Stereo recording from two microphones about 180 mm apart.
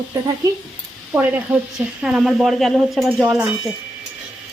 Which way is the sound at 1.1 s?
10° right (ahead or behind).